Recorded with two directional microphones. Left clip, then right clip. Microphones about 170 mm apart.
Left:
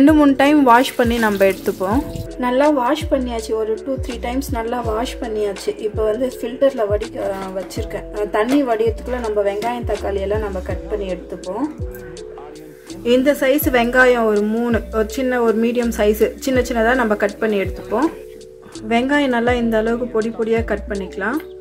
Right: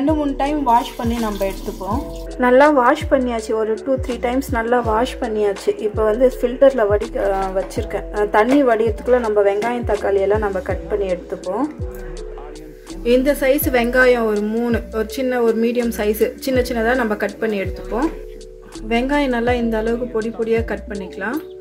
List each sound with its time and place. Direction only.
0.0 s speech: 60° left (ahead or behind)
2.3 s a woman's voice: centre (ahead or behind)
13.0 s a woman's voice: 5° left (ahead or behind)